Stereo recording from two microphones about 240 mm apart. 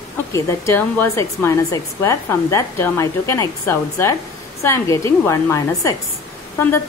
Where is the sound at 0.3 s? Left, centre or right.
Centre.